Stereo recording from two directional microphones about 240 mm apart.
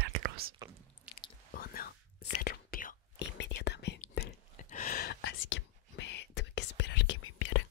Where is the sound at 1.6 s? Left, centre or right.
Left.